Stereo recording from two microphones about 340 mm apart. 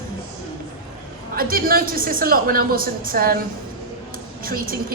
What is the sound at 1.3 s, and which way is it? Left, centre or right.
A woman's voice, right.